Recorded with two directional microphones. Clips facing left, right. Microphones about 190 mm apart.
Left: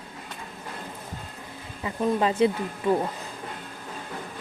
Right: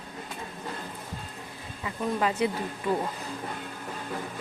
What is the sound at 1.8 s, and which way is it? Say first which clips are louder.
Speech: left 4 dB; 25° left (ahead or behind).